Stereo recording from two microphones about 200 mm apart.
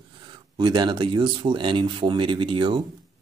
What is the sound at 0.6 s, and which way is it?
Speech, 20° right (ahead or behind).